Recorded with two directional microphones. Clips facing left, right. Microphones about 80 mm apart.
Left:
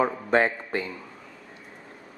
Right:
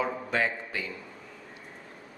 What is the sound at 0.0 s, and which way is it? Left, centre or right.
Speech, left.